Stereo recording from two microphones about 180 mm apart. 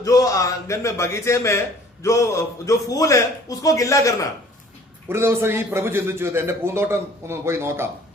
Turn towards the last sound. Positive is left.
turn(degrees=-15)  # may be behind; listen again after turning